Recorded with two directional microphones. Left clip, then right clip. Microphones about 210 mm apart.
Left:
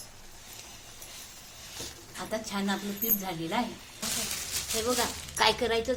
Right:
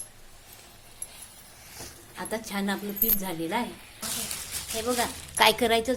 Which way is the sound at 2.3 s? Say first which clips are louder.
Right 1 dB; 35° right (ahead or behind).